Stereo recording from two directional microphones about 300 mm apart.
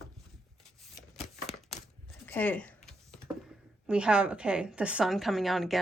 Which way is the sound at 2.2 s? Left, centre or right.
Centre.